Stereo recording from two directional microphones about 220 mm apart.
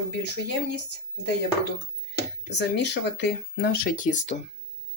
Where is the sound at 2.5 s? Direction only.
50° left (ahead or behind); by 4.4 s 35° left (ahead or behind).